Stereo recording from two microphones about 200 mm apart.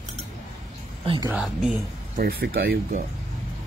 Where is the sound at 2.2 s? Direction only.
50° right (ahead or behind).